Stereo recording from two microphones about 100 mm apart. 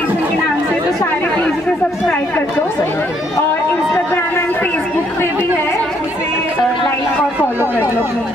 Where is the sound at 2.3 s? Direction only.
20° left (ahead or behind).